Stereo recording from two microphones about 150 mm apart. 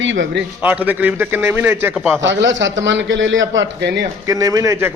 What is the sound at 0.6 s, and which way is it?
A man's voice, 10° right (ahead or behind).